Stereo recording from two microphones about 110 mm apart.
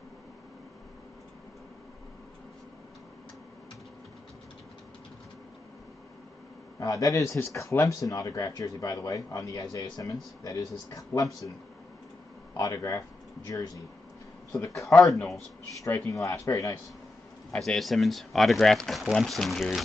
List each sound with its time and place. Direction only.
6.8 s speech: 30° left (ahead or behind)
12.5 s speech: 35° left (ahead or behind)
14.5 s speech: 5° left (ahead or behind)
14.9 s speech: 25° left (ahead or behind)
17.5 s speech: 5° left (ahead or behind)